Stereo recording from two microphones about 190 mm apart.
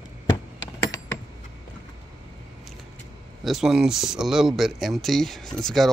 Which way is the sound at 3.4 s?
Centre (ahead or behind).